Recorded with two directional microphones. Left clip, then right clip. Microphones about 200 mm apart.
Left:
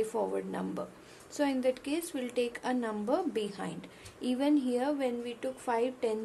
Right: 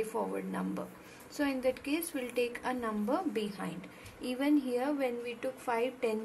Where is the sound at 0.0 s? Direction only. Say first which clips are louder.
Left 3 dB; 20° left (ahead or behind).